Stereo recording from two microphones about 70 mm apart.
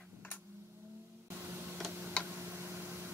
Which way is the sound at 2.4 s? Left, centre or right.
Right.